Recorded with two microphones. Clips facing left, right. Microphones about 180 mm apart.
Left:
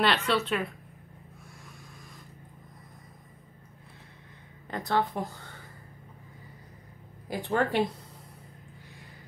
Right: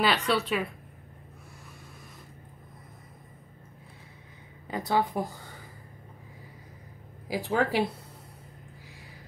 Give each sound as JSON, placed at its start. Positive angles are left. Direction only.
{"t": 0.0, "sound": "a woman's voice", "side_deg": 0}
{"t": 4.6, "sound": "speech", "side_deg": -10}
{"t": 7.2, "sound": "a woman's voice", "side_deg": -5}